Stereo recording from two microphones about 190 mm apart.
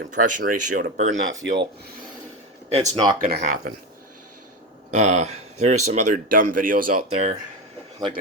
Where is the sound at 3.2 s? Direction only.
55° right (ahead or behind).